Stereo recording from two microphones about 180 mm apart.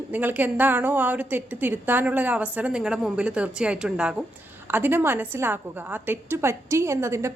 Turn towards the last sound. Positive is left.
turn(degrees=-15)  # may be behind; listen again after turning